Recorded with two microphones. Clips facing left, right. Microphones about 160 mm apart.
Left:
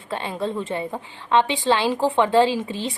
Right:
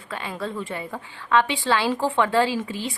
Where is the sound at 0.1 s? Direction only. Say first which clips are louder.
Left 4 dB; 25° left (ahead or behind).